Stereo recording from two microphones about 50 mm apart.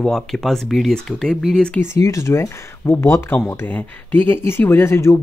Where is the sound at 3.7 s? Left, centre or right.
Left.